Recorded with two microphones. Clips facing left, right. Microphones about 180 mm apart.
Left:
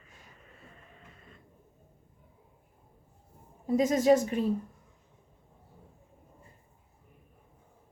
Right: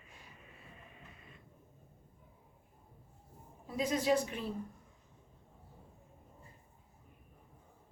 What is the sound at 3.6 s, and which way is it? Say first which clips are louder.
Speech: left 9 dB; 45° left (ahead or behind).